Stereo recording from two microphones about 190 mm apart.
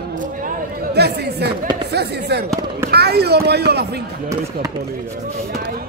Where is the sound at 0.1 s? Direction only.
45° right (ahead or behind); by 1.5 s 60° right (ahead or behind).